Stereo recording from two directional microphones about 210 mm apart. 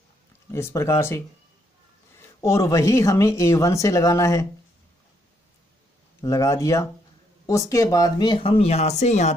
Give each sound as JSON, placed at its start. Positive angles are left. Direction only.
{"t": 0.5, "sound": "speech", "side_deg": 10}
{"t": 2.4, "sound": "speech", "side_deg": 15}
{"t": 6.2, "sound": "speech", "side_deg": 15}